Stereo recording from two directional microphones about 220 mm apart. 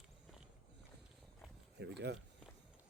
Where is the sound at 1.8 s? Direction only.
50° right (ahead or behind).